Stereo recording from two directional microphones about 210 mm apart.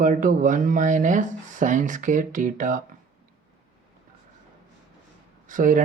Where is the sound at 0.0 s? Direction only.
40° right (ahead or behind).